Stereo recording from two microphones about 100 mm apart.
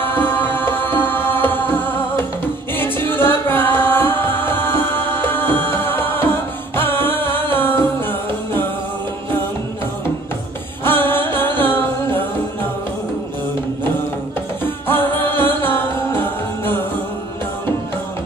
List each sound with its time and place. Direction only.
0.0 s music: 20° left (ahead or behind)
10.8 s music: 20° left (ahead or behind)
14.6 s music: 20° left (ahead or behind)